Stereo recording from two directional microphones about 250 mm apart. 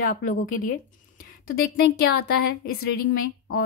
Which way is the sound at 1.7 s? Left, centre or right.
Left.